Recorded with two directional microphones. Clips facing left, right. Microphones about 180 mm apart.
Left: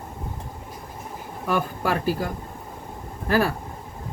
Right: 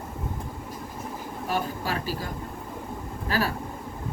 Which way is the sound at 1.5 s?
55° left (ahead or behind).